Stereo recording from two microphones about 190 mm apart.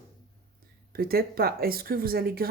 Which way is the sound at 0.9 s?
55° right (ahead or behind).